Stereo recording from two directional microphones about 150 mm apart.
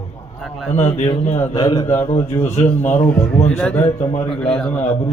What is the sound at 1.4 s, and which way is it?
A man's voice, 25° left (ahead or behind).